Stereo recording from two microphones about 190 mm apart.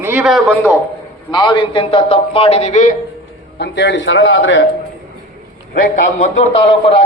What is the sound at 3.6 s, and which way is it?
A man's voice, 65° left (ahead or behind).